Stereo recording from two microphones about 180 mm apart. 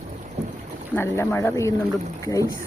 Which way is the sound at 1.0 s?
15° left (ahead or behind).